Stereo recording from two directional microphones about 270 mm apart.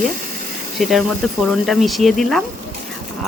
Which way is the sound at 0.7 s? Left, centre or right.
Centre.